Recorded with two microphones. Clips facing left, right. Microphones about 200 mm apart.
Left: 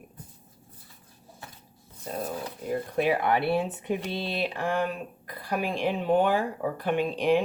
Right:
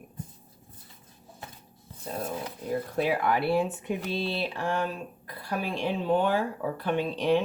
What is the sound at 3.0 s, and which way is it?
A woman's voice, 20° left (ahead or behind).